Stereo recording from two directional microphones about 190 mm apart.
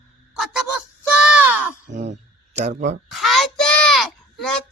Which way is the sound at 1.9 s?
40° right (ahead or behind).